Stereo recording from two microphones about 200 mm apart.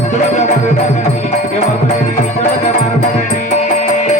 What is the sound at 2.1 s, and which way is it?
Music, 35° left (ahead or behind).